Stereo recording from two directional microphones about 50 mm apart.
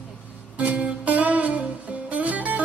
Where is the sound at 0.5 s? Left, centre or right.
Right.